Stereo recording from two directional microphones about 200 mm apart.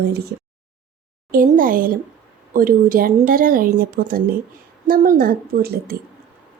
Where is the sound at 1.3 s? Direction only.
45° right (ahead or behind).